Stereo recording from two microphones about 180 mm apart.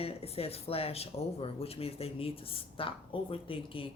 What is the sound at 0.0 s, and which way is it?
Speech, 35° left (ahead or behind).